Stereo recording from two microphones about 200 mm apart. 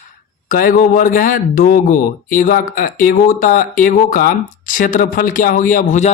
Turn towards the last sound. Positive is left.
turn(degrees=40)  # may be behind; listen again after turning